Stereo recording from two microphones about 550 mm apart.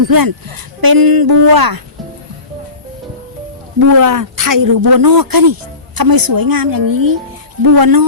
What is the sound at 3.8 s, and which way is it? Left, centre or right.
Speech, right.